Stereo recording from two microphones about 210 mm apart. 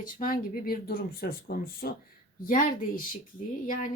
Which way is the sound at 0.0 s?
40° left (ahead or behind).